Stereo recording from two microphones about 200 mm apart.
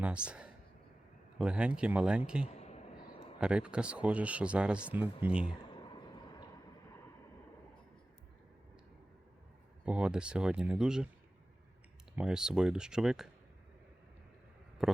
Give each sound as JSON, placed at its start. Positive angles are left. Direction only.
{"t": 0.0, "sound": "speech", "side_deg": -5}
{"t": 2.6, "sound": "a sound", "side_deg": 35}
{"t": 3.4, "sound": "speech", "side_deg": -5}
{"t": 5.9, "sound": "a sound", "side_deg": 20}
{"t": 9.8, "sound": "speech", "side_deg": -5}
{"t": 12.1, "sound": "speech", "side_deg": -5}
{"t": 14.8, "sound": "speech", "side_deg": -5}